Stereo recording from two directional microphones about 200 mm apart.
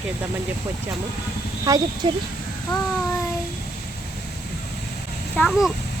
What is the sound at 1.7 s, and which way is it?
Speech, 15° right (ahead or behind).